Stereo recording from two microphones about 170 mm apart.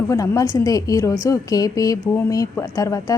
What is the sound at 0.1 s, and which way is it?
A woman's voice, 20° left (ahead or behind).